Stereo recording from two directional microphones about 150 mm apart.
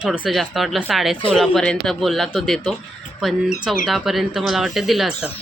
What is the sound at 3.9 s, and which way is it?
Speech, centre (ahead or behind).